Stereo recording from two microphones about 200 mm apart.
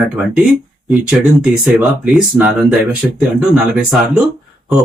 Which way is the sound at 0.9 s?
10° right (ahead or behind).